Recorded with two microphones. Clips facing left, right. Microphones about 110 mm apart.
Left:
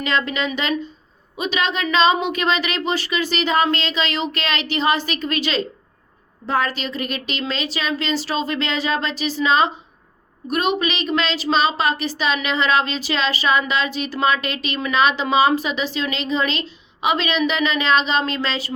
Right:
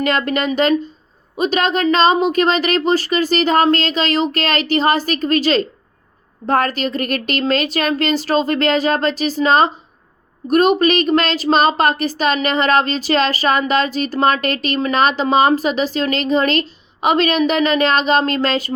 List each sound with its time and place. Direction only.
0.0 s a woman's voice: 50° right (ahead or behind)